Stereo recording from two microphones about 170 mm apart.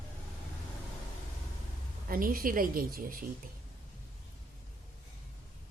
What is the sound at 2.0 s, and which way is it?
A woman's voice, 55° right (ahead or behind).